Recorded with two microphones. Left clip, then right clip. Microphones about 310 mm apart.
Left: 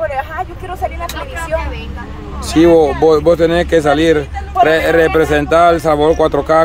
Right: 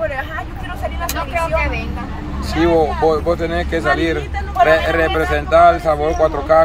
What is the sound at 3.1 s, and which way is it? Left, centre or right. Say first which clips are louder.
A man's voice: left 8 dB; left.